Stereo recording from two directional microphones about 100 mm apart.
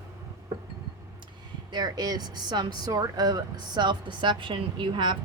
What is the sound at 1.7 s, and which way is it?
Speech, 45° right (ahead or behind).